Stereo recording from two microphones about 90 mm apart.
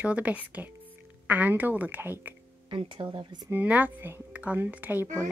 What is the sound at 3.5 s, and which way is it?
A woman's voice, 20° right (ahead or behind).